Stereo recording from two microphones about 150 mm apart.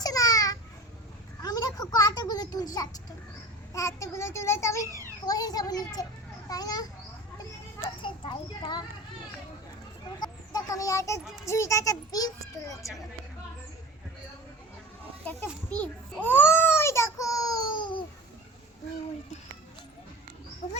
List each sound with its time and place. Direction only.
0.0 s a sound: 25° left (ahead or behind)
3.8 s a child's voice: 20° left (ahead or behind)
8.0 s children playing: 35° left (ahead or behind)
10.2 s a child's voice: 25° left (ahead or behind)
15.2 s children playing: 10° left (ahead or behind)
15.7 s a sound: 10° left (ahead or behind)
17.7 s babbling: 30° left (ahead or behind)